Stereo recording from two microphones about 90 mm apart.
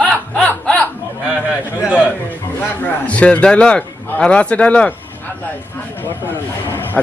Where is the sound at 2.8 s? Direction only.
15° left (ahead or behind).